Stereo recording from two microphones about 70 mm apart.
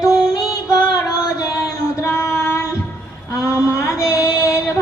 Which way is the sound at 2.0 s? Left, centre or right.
Left.